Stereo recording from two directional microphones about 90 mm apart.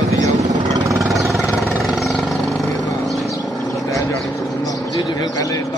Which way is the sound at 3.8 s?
35° left (ahead or behind).